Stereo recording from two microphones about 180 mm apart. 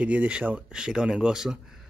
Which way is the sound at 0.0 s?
5° right (ahead or behind).